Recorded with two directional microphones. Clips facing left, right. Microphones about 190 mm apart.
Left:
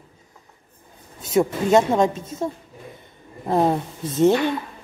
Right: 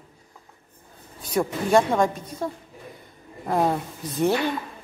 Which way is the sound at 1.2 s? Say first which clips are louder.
Left 5 dB; 25° left (ahead or behind).